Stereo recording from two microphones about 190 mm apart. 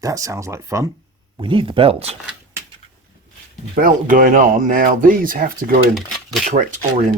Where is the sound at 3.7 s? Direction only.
45° right (ahead or behind).